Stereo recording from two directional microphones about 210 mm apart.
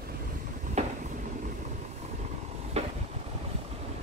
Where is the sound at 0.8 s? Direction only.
30° right (ahead or behind).